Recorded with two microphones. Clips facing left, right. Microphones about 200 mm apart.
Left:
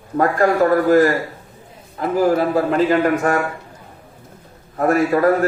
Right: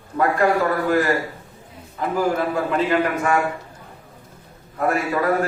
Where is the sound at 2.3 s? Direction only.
40° left (ahead or behind).